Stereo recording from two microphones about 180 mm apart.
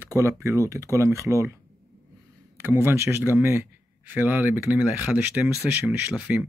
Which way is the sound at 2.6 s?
15° right (ahead or behind).